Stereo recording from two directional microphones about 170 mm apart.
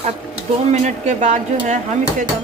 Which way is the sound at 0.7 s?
45° right (ahead or behind).